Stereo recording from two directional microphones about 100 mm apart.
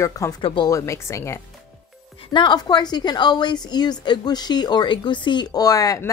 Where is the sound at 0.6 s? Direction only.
30° left (ahead or behind).